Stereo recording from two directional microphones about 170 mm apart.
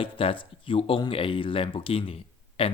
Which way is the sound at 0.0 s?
30° left (ahead or behind).